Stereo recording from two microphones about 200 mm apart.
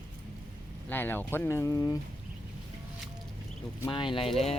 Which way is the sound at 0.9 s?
10° left (ahead or behind).